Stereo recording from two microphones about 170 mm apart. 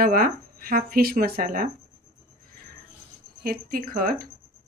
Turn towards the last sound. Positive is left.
turn(degrees=-55)  # may be behind; listen again after turning